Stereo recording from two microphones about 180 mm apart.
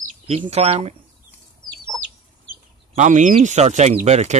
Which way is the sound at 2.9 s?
45° right (ahead or behind).